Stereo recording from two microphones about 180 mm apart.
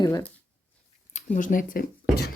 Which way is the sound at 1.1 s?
45° left (ahead or behind).